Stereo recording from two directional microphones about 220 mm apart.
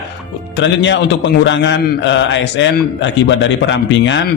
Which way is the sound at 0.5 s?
55° left (ahead or behind).